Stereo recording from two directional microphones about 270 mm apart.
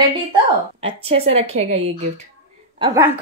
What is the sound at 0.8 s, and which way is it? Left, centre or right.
Speech, right.